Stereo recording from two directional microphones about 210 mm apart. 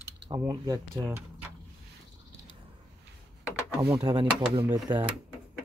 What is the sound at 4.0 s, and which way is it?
Speech, 25° right (ahead or behind).